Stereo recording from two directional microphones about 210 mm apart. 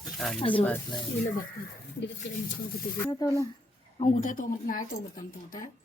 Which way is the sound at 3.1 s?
15° left (ahead or behind).